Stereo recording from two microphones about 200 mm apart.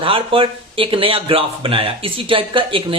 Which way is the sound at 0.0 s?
25° right (ahead or behind).